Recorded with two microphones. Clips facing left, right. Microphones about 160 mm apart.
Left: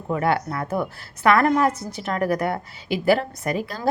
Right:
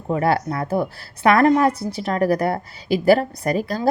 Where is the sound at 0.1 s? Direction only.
35° right (ahead or behind).